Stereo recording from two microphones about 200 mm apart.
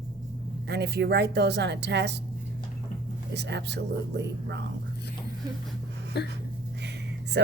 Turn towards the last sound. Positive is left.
turn(degrees=-60)  # may be behind; listen again after turning